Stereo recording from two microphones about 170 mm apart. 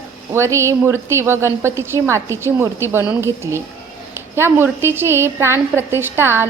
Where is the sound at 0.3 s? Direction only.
15° right (ahead or behind).